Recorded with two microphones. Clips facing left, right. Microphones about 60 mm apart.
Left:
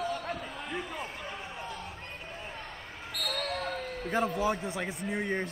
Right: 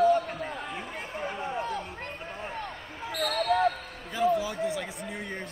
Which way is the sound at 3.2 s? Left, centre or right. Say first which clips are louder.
Right 9 dB; right.